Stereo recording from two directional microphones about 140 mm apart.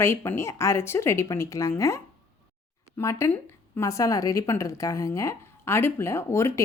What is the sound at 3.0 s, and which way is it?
A woman's voice, 20° left (ahead or behind).